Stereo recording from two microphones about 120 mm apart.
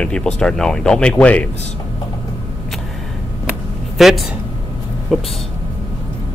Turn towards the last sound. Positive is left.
turn(degrees=0)  # may be behind; listen again after turning